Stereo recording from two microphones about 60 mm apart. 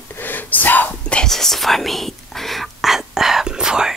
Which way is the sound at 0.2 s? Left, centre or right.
Left.